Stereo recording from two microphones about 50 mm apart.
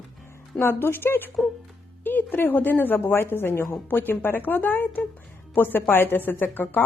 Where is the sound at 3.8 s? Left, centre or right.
Left.